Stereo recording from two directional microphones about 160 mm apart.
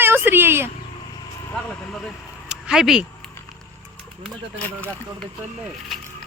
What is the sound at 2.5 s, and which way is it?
Speech, 5° right (ahead or behind).